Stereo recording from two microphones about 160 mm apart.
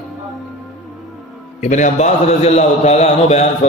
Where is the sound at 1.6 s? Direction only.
50° left (ahead or behind).